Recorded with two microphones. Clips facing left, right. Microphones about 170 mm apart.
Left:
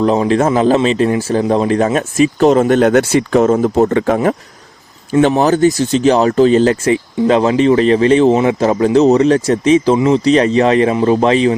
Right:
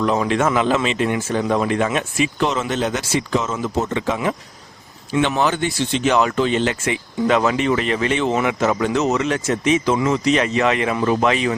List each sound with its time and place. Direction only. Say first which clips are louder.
0.0 s speech: left 6 dB; 30° left (ahead or behind); by 4.4 s 50° left (ahead or behind)
5.1 s speech: left 8 dB; 40° left (ahead or behind)